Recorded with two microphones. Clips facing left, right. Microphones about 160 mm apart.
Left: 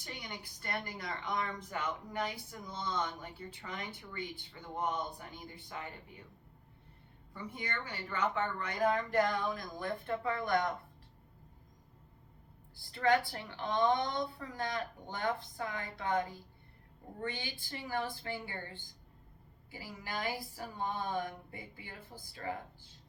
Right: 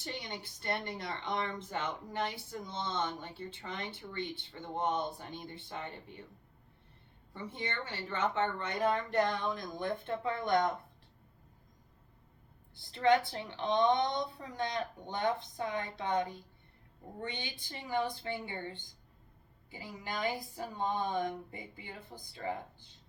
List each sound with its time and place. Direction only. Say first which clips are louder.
0.0 s a woman's voice: right 4 dB; 25° right (ahead or behind)
7.3 s a woman's voice: right 2 dB; 25° right (ahead or behind)
12.7 s a woman's voice: right 2 dB; 20° right (ahead or behind)